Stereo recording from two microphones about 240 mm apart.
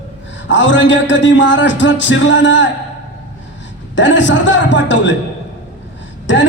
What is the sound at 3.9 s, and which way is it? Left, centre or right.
A man's voice, left.